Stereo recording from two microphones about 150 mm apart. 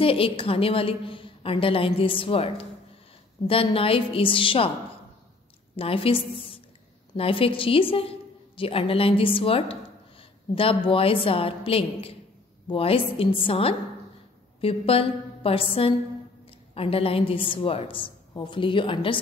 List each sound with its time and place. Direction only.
0.0 s a woman's voice: 40° left (ahead or behind)
5.8 s a woman's voice: 40° left (ahead or behind)